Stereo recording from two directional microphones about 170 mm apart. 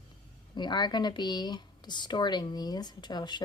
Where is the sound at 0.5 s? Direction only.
25° left (ahead or behind).